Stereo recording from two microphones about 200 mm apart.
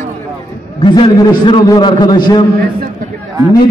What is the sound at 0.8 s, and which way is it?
A man's voice, 25° left (ahead or behind).